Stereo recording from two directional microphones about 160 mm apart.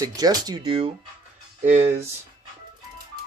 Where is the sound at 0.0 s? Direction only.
25° right (ahead or behind).